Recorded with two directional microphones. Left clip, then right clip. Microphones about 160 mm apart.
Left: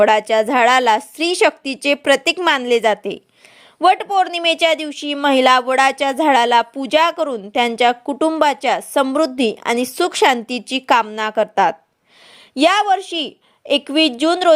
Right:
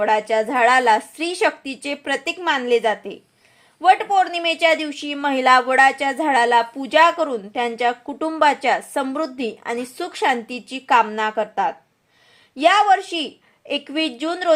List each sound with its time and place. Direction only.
0.0 s speech: 40° left (ahead or behind)